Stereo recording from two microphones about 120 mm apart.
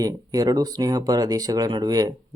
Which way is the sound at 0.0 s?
30° right (ahead or behind).